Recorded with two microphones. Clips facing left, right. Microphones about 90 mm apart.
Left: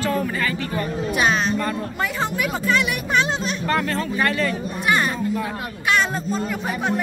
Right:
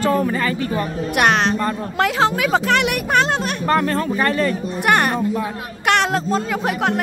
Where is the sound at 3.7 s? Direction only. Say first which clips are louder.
Right 5 dB; 35° right (ahead or behind).